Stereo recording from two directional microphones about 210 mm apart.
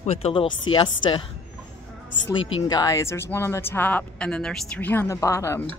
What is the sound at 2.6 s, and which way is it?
Speech, 15° left (ahead or behind).